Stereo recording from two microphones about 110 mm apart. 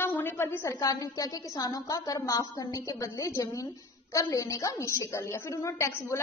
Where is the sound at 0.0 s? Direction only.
20° left (ahead or behind).